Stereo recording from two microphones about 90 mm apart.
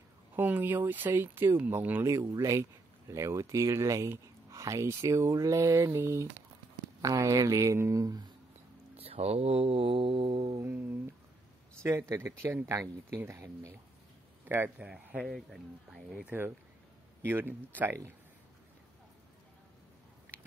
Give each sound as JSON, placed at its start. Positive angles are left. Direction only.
{"t": 0.4, "sound": "speech", "side_deg": -20}
{"t": 2.1, "sound": "speech", "side_deg": -35}
{"t": 8.9, "sound": "mantra", "side_deg": -90}
{"t": 11.8, "sound": "a man's voice", "side_deg": -30}
{"t": 15.2, "sound": "speech", "side_deg": 5}
{"t": 16.3, "sound": "speech", "side_deg": -25}